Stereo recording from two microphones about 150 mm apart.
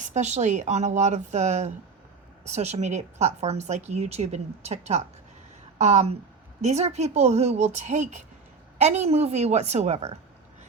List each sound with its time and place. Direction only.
0.0 s a woman's voice: 50° right (ahead or behind)